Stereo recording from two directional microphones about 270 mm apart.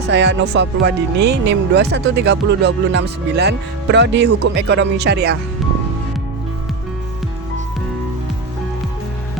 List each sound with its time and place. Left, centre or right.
0.1 s speech: right